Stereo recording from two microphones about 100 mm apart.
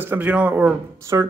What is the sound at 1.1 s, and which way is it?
Speech, 35° right (ahead or behind).